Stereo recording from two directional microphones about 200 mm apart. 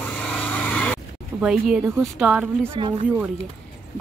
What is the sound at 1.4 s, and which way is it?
Speech, 5° right (ahead or behind).